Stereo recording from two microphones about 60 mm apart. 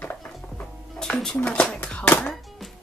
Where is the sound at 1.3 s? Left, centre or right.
Left.